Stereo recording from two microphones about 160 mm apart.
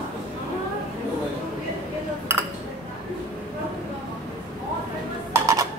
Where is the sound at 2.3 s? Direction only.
15° right (ahead or behind).